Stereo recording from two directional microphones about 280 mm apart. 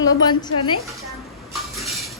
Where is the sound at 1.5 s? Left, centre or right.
Centre.